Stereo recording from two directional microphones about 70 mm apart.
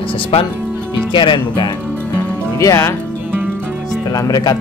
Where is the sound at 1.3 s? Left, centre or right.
Left.